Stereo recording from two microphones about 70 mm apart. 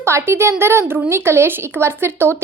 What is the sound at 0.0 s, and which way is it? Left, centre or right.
A woman's voice, right.